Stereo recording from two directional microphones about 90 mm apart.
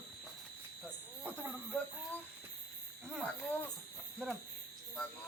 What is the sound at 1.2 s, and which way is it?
Speech, 20° right (ahead or behind).